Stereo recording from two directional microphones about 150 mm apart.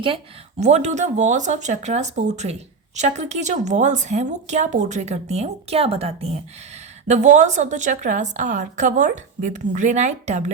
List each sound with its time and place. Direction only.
0.6 s speech: 50° right (ahead or behind)